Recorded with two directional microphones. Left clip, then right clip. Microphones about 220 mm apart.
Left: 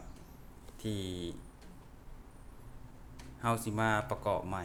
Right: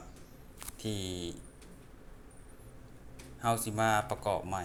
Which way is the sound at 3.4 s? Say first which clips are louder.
Right 2 dB; 15° left (ahead or behind).